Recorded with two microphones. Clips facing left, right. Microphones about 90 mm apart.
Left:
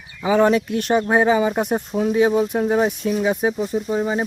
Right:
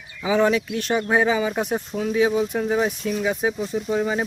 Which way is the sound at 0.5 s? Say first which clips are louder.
Left 4 dB; 50° left (ahead or behind).